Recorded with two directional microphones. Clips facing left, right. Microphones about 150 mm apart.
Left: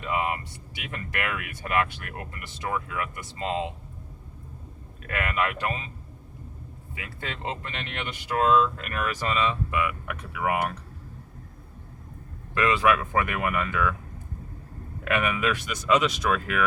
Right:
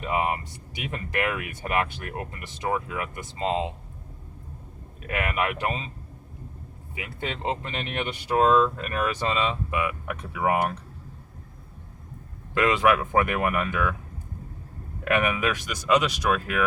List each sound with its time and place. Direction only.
0.0 s speech: 25° right (ahead or behind)
5.0 s speech: 20° right (ahead or behind)
6.9 s speech: 20° right (ahead or behind)
12.5 s speech: 20° right (ahead or behind)
15.0 s speech: 10° right (ahead or behind)